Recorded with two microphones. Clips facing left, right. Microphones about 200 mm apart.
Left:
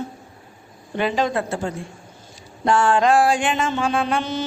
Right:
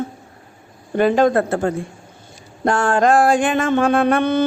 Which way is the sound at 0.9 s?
50° right (ahead or behind).